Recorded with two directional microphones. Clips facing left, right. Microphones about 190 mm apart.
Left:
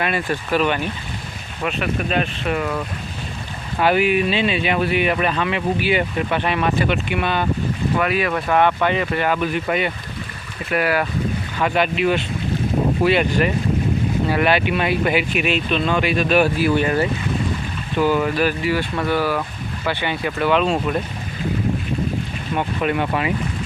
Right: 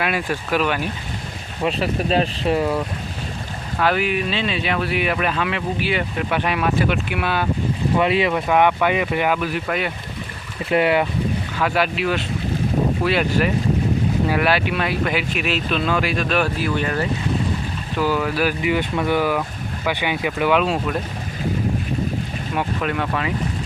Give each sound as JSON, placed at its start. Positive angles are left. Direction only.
{"t": 0.0, "sound": "speech", "side_deg": -5}
{"t": 1.6, "sound": "speech", "side_deg": -30}
{"t": 3.8, "sound": "speech", "side_deg": 5}
{"t": 7.9, "sound": "speech", "side_deg": -25}
{"t": 8.3, "sound": "speech", "side_deg": -15}
{"t": 10.7, "sound": "speech", "side_deg": -20}
{"t": 11.6, "sound": "speech", "side_deg": 0}
{"t": 22.5, "sound": "speech", "side_deg": 5}